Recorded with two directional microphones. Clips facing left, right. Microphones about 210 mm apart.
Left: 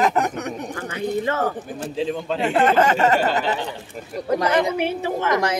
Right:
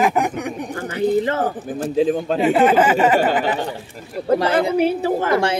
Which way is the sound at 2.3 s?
5° right (ahead or behind).